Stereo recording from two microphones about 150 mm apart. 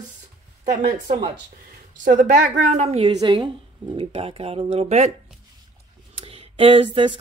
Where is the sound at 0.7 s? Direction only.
55° right (ahead or behind).